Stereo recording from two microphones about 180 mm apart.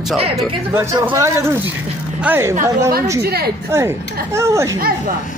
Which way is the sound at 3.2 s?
60° right (ahead or behind).